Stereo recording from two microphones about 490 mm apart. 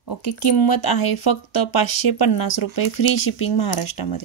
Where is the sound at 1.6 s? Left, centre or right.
Left.